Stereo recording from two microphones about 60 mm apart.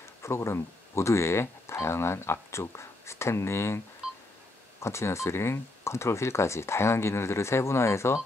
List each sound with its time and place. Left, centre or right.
0.0 s speech: left